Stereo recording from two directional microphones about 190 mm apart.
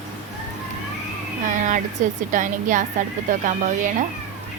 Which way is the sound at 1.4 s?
40° right (ahead or behind).